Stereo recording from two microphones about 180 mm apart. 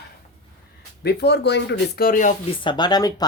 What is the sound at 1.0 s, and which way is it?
Speech, 65° left (ahead or behind).